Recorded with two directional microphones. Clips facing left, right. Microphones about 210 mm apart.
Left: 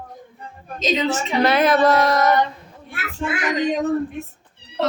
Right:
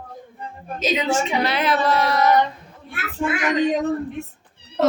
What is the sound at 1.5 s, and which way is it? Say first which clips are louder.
Speech: left 5 dB; 45° left (ahead or behind).